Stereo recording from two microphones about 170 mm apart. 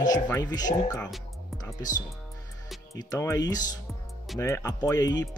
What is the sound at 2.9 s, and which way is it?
Speech, 20° left (ahead or behind).